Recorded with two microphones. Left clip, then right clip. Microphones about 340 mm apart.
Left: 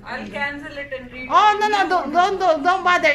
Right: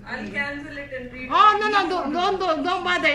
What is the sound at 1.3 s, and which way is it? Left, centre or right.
A man's voice, centre.